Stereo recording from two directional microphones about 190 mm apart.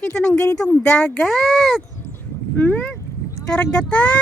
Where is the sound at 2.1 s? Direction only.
10° left (ahead or behind).